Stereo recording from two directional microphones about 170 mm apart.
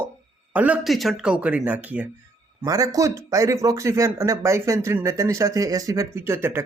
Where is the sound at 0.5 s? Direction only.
10° right (ahead or behind).